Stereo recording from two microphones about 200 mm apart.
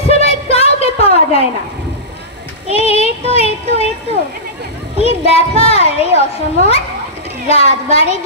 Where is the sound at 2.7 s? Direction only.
30° left (ahead or behind).